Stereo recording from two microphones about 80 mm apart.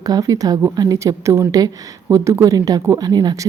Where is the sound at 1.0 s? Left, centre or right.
Right.